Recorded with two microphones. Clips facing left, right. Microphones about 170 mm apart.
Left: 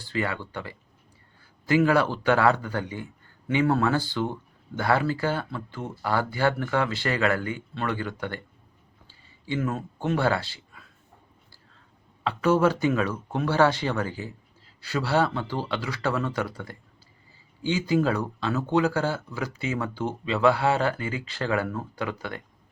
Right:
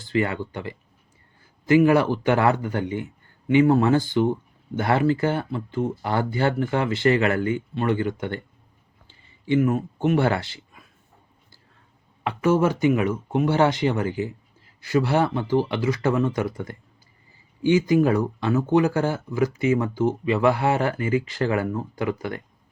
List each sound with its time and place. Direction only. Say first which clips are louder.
0.0 s speech: right 5 dB; 20° right (ahead or behind)
1.8 s a man's voice: right 4 dB; 15° right (ahead or behind)
9.0 s a sound: right 8 dB; 20° right (ahead or behind)
12.2 s a man's voice: right 1 dB; 15° right (ahead or behind)